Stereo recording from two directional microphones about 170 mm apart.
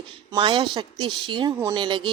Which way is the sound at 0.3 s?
30° right (ahead or behind).